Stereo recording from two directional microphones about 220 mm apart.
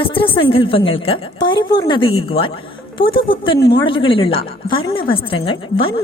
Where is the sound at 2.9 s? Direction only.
25° left (ahead or behind).